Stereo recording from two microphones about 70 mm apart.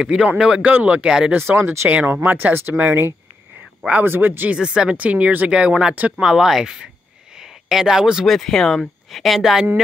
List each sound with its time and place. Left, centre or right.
0.0 s speech: centre
0.6 s speech: right
1.3 s speech: right
2.1 s speech: right
4.6 s speech: centre
6.2 s speech: centre
7.3 s a sound: centre
8.3 s speech: centre